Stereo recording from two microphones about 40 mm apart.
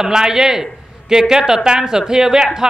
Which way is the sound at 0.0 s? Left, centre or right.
Centre.